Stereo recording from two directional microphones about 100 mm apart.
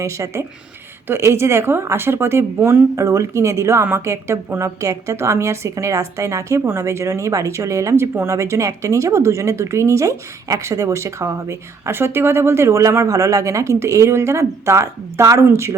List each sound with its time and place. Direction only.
0.0 s a woman's voice: 30° right (ahead or behind)